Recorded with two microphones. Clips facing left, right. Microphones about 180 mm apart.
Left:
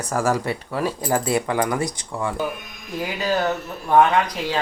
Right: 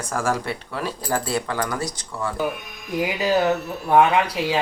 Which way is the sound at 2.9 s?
15° right (ahead or behind).